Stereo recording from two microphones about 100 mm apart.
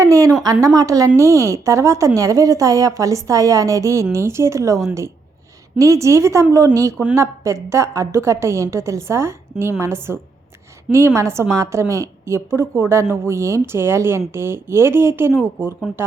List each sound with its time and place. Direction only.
0.0 s a woman's voice: 35° right (ahead or behind)
15.9 s speech: 5° right (ahead or behind)